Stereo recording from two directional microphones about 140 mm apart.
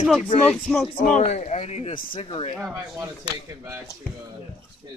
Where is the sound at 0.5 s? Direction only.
5° left (ahead or behind).